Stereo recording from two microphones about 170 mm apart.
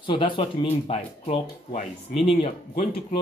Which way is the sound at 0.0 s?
30° left (ahead or behind).